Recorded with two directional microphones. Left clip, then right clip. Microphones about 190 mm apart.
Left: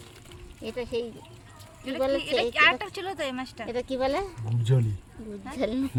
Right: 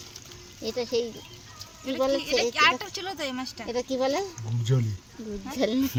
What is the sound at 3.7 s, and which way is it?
Speech, 20° right (ahead or behind).